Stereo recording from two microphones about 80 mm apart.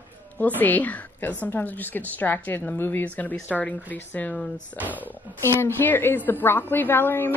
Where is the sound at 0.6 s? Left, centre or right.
Left.